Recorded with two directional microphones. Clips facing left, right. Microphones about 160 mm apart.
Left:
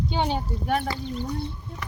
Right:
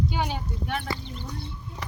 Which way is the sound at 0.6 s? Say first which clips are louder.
Left 7 dB; 40° left (ahead or behind).